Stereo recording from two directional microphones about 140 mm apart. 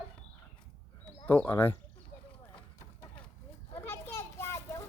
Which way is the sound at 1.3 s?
15° left (ahead or behind).